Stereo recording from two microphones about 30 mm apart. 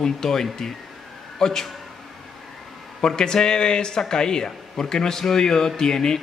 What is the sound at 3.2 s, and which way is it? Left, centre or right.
Speech, left.